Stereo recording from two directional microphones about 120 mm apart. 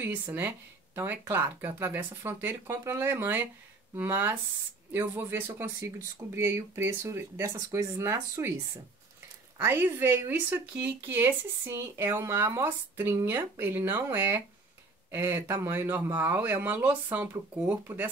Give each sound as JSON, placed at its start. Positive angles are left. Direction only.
{"t": 0.0, "sound": "speech", "side_deg": -15}
{"t": 9.6, "sound": "speech", "side_deg": -20}